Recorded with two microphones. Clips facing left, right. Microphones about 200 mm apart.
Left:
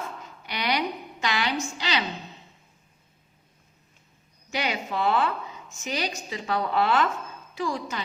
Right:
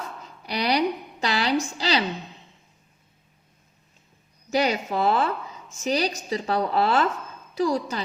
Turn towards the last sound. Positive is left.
turn(degrees=-40)  # may be behind; listen again after turning